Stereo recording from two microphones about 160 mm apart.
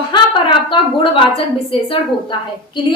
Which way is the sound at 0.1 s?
30° left (ahead or behind).